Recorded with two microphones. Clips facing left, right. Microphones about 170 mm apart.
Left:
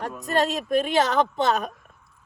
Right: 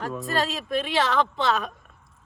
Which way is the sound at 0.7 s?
45° left (ahead or behind).